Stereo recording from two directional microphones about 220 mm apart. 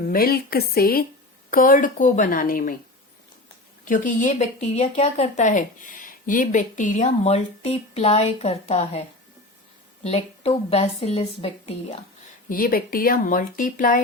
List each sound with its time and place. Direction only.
0.0 s a woman's voice: 40° left (ahead or behind)
3.8 s a woman's voice: 35° left (ahead or behind)
12.5 s speech: 40° left (ahead or behind)